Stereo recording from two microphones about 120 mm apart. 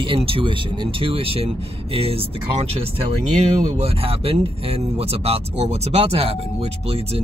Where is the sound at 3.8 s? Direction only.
50° right (ahead or behind).